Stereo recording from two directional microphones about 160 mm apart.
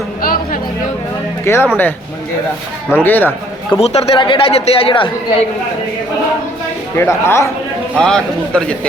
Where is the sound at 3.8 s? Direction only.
40° left (ahead or behind).